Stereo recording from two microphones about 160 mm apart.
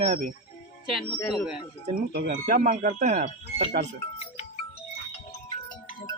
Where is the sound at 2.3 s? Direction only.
55° right (ahead or behind).